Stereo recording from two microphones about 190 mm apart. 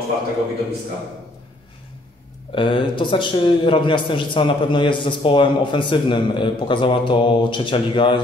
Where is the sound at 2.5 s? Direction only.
25° left (ahead or behind).